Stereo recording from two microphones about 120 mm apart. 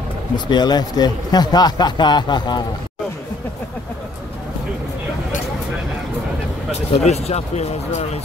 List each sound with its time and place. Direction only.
0.5 s a man's voice: 35° left (ahead or behind)
6.9 s speech: 65° left (ahead or behind)